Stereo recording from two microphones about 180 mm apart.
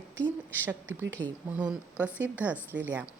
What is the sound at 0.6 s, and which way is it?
A woman's voice, 10° right (ahead or behind).